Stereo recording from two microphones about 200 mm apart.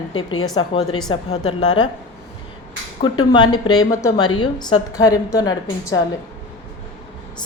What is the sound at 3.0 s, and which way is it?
A woman's voice, 20° left (ahead or behind).